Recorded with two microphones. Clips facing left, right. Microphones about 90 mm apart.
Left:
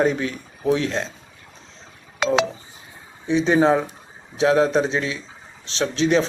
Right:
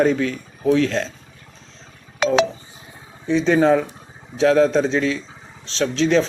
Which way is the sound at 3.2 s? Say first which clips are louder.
Right 1 dB; 20° left (ahead or behind).